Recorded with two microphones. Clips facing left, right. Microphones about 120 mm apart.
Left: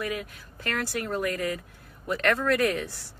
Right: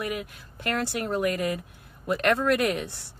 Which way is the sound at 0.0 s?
20° right (ahead or behind).